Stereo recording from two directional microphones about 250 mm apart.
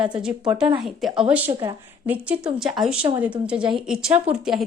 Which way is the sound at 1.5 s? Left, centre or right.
Centre.